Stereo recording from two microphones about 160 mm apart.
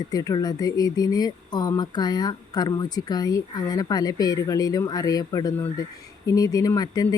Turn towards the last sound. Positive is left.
turn(degrees=25)  # may be behind; listen again after turning